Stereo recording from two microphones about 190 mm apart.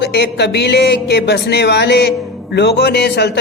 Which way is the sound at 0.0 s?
65° left (ahead or behind).